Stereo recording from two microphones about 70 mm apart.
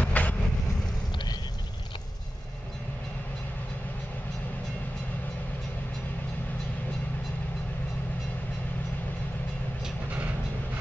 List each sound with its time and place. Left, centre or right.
0.0 s vehicle: left
1.1 s vehicle: left